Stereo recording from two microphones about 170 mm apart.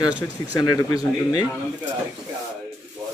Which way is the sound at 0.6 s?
20° left (ahead or behind).